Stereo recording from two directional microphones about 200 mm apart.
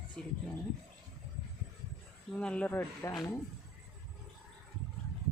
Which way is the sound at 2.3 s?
5° left (ahead or behind).